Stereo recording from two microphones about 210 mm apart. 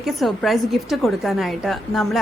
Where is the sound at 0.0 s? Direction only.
Centre (ahead or behind).